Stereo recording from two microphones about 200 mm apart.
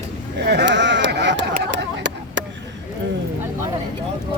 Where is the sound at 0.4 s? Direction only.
60° right (ahead or behind).